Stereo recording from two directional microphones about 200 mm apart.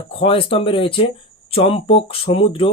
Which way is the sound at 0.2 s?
25° left (ahead or behind).